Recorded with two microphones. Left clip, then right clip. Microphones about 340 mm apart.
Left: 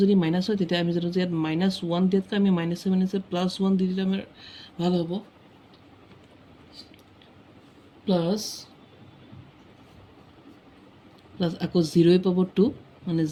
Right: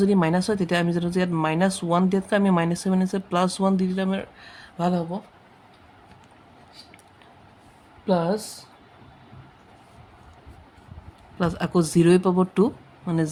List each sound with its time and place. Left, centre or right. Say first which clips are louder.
0.0 s speech: right 2 dB; centre
8.0 s speech: right 3 dB; centre
11.3 s speech: right 2 dB; centre